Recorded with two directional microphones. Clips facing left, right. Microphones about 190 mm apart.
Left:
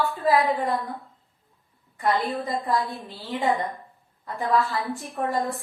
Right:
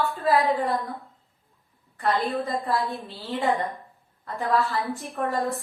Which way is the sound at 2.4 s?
15° left (ahead or behind).